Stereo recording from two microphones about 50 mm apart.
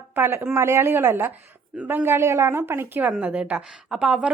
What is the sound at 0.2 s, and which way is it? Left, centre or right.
A woman's voice, right.